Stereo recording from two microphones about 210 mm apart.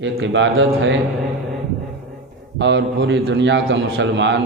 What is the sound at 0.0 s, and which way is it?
Speech, 60° right (ahead or behind).